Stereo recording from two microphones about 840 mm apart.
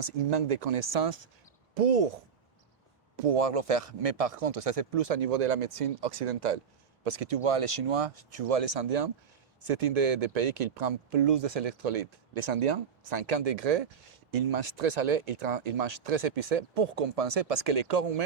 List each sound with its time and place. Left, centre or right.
0.0 s speech: right
3.2 s a man's voice: right